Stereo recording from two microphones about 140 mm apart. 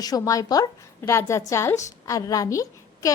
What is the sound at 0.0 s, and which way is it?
A woman's voice, 25° left (ahead or behind).